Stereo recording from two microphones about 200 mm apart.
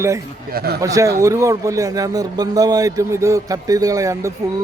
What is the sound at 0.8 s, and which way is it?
A man's voice, 15° right (ahead or behind).